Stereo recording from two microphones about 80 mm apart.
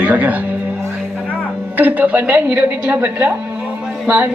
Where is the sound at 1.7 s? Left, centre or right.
Right.